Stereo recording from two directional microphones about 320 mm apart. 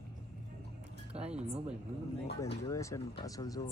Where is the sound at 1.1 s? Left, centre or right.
Centre.